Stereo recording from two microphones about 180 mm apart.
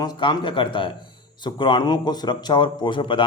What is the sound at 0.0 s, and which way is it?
Speech, 25° left (ahead or behind).